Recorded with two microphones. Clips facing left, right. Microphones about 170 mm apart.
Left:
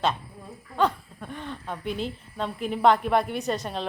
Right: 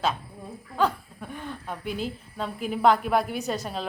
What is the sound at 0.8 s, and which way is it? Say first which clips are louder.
A woman's voice: left 1 dB; 5° right (ahead or behind).